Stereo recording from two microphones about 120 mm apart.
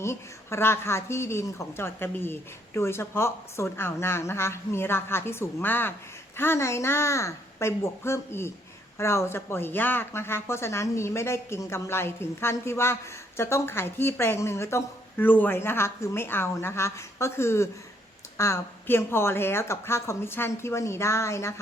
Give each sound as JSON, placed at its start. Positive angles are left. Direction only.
{"t": 0.0, "sound": "a woman's voice", "side_deg": 20}